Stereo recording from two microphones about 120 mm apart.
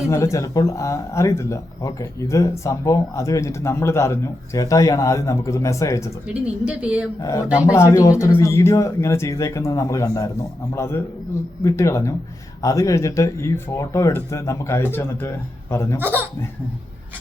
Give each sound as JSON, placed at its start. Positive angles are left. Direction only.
{"t": 0.1, "sound": "speech", "side_deg": 25}
{"t": 6.2, "sound": "a woman's voice", "side_deg": -10}
{"t": 7.2, "sound": "speech", "side_deg": 30}
{"t": 16.0, "sound": "a woman's voice", "side_deg": -15}